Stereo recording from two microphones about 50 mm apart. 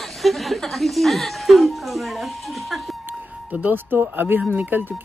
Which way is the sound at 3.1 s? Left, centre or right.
Right.